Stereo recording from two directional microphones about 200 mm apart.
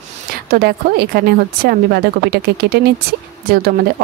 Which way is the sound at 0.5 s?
50° right (ahead or behind).